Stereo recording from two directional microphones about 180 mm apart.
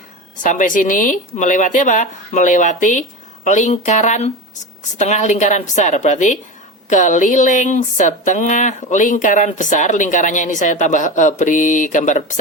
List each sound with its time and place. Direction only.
0.4 s speech: 45° left (ahead or behind)